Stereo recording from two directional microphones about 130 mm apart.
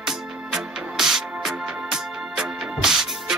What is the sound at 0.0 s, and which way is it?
Music, 5° right (ahead or behind).